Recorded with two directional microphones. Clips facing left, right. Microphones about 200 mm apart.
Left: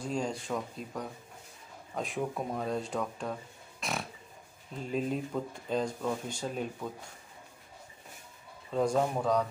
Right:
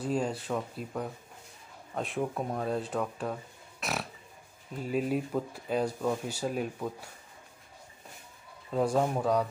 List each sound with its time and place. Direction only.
0.0 s speech: 5° right (ahead or behind)
3.8 s pig: 5° right (ahead or behind)
4.7 s speech: 5° right (ahead or behind)
8.7 s speech: 5° right (ahead or behind)